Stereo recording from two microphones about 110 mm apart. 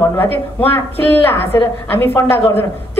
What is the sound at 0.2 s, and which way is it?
A woman's voice, 20° left (ahead or behind).